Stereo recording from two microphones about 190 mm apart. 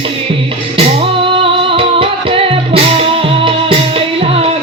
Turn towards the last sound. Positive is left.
turn(degrees=-30)  # may be behind; listen again after turning